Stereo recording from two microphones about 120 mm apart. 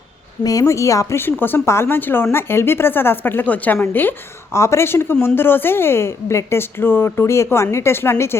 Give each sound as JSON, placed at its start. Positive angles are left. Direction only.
{"t": 0.4, "sound": "a woman's voice", "side_deg": 30}